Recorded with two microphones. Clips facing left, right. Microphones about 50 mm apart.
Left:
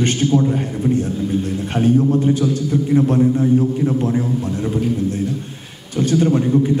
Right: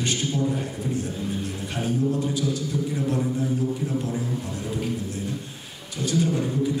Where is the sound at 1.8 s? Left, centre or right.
Left.